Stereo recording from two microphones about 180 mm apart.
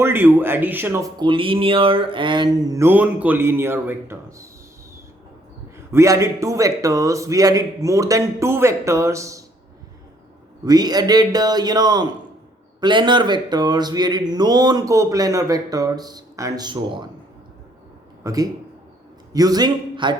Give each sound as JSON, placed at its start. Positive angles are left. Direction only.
{"t": 0.0, "sound": "a man's voice", "side_deg": -10}
{"t": 1.2, "sound": "speech", "side_deg": -30}
{"t": 5.7, "sound": "a man's voice", "side_deg": -15}
{"t": 10.7, "sound": "speech", "side_deg": -20}
{"t": 18.2, "sound": "a man's voice", "side_deg": -20}